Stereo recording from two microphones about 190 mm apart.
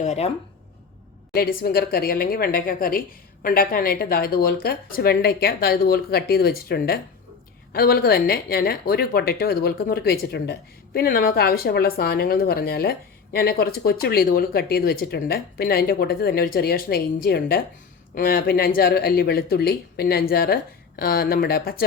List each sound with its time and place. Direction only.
0.0 s speech: 35° left (ahead or behind)
1.3 s speech: 50° left (ahead or behind)